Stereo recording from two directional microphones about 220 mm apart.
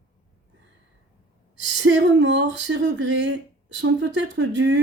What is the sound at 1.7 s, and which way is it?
Speech, 55° right (ahead or behind).